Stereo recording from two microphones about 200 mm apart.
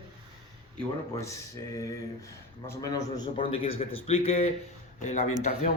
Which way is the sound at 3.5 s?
30° left (ahead or behind).